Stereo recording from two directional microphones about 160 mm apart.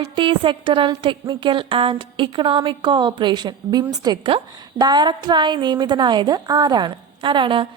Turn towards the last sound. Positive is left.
turn(degrees=-30)  # may be behind; listen again after turning